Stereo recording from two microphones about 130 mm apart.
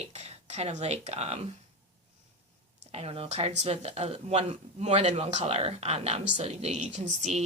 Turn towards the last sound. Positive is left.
turn(degrees=-60)  # may be behind; listen again after turning